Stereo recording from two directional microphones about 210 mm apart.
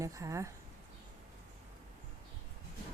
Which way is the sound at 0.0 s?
15° right (ahead or behind).